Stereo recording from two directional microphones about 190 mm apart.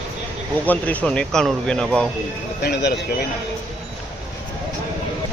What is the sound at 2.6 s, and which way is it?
Speech, 60° left (ahead or behind).